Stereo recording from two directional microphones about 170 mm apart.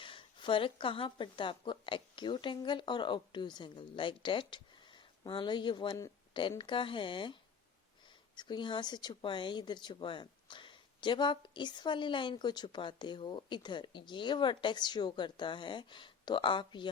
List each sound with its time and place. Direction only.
0.0 s a woman's voice: 30° left (ahead or behind)
8.4 s speech: 25° left (ahead or behind)